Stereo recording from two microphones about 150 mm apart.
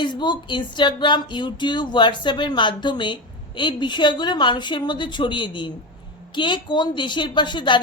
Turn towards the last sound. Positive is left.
turn(degrees=30)  # may be behind; listen again after turning